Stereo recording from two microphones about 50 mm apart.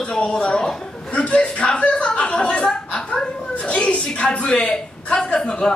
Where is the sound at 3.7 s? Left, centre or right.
Left.